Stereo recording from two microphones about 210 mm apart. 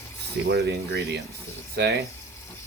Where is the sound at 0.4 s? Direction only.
50° right (ahead or behind).